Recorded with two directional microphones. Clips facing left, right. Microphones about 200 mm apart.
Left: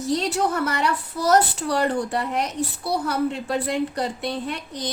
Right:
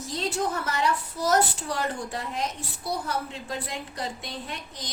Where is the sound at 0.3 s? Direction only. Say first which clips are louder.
Left 5 dB; 65° left (ahead or behind).